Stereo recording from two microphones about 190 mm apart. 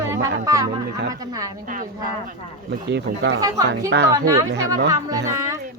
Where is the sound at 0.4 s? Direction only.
20° right (ahead or behind).